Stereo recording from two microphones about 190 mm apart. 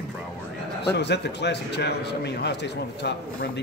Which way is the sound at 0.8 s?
60° left (ahead or behind).